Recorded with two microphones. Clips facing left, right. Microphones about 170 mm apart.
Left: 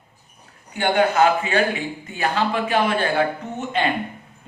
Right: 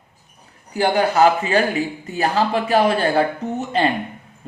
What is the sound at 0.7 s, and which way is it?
Speech, 35° right (ahead or behind).